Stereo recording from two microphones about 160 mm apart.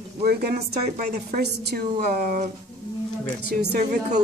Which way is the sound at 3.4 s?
90° right.